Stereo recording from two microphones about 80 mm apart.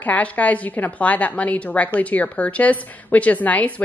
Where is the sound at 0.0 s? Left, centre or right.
Centre.